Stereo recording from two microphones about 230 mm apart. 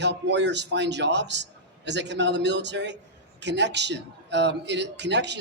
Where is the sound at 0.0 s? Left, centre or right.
Right.